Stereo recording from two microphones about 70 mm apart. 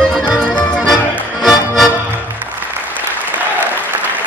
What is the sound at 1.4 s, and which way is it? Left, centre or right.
Music, centre.